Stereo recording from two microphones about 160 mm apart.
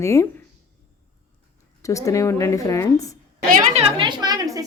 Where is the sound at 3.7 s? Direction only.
35° right (ahead or behind).